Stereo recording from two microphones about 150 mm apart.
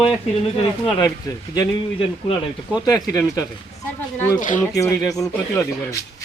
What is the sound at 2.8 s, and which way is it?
Speech, 25° left (ahead or behind).